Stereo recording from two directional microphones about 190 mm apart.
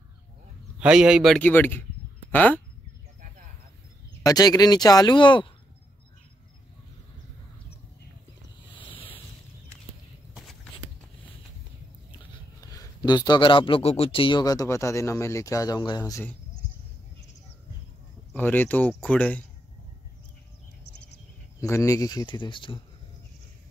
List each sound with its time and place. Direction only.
0.7 s a man's voice: 5° right (ahead or behind)
4.2 s a man's voice: 20° left (ahead or behind)
8.7 s a sound: 25° left (ahead or behind)
12.7 s a man's voice: 20° left (ahead or behind)
18.3 s speech: 10° left (ahead or behind)
21.5 s a man's voice: 15° left (ahead or behind)